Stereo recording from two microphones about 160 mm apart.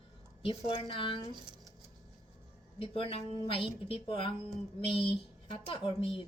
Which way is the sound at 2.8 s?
35° left (ahead or behind).